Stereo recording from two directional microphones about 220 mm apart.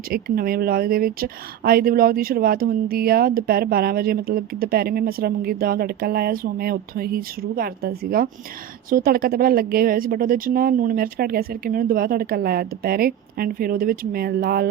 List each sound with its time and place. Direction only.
0.1 s speech: 45° right (ahead or behind)